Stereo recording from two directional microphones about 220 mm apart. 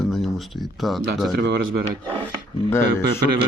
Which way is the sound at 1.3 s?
50° right (ahead or behind).